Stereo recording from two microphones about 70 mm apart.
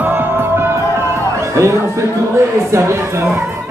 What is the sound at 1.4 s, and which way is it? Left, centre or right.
Speech, right.